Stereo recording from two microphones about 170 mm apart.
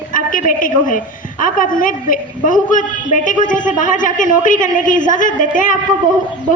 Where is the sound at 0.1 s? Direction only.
50° left (ahead or behind).